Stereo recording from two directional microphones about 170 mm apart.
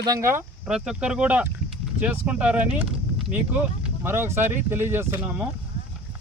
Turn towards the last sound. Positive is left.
turn(degrees=-10)  # may be behind; listen again after turning